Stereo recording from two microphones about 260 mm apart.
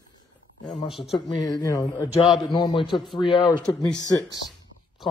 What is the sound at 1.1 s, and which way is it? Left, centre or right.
Speech, centre.